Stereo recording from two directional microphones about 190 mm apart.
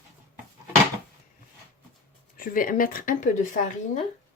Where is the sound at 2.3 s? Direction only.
45° left (ahead or behind).